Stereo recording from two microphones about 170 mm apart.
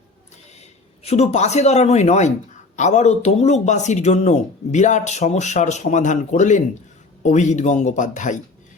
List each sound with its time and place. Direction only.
0.6 s a man's voice: 40° left (ahead or behind)